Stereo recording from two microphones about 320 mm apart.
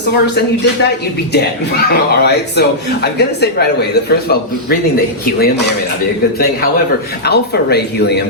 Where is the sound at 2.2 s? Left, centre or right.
Left.